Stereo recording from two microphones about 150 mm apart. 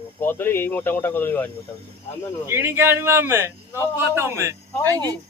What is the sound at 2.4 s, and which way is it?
A man's voice, 15° right (ahead or behind).